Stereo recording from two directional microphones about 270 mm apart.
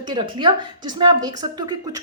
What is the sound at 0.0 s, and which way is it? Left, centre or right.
A woman's voice, centre.